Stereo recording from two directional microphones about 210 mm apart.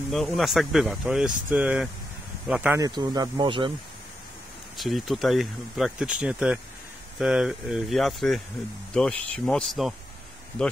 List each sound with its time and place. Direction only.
0.1 s speech: centre (ahead or behind)
2.8 s speech: 20° right (ahead or behind)
4.7 s speech: centre (ahead or behind)